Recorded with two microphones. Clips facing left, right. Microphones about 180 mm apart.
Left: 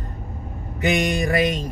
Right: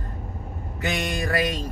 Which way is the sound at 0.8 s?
20° left (ahead or behind).